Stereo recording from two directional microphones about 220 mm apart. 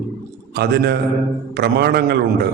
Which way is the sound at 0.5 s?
45° right (ahead or behind).